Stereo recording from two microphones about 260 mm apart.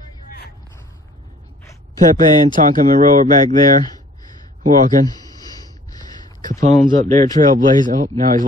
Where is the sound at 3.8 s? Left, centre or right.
Centre.